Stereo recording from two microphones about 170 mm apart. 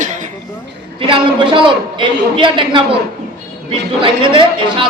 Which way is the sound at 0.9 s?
30° right (ahead or behind).